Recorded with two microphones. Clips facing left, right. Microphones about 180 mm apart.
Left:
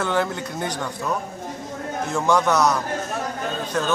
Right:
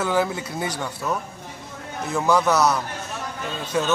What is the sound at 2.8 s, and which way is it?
Chatter, 45° left (ahead or behind).